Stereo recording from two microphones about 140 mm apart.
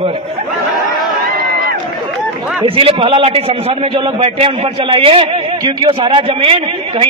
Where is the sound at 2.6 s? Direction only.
40° right (ahead or behind).